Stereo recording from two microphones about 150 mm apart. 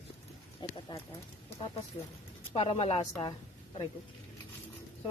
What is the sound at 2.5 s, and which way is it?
Speech, 35° left (ahead or behind).